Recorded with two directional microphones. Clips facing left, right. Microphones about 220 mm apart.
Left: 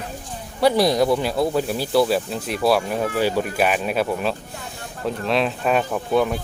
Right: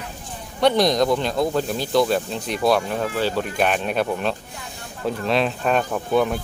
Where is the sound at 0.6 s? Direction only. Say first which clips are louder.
Left 1 dB; 5° left (ahead or behind).